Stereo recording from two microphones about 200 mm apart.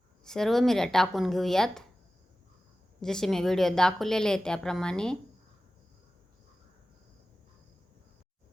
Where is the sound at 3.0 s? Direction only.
Centre (ahead or behind).